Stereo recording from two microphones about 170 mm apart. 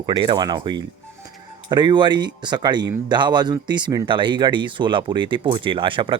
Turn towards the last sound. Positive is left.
turn(degrees=-30)  # may be behind; listen again after turning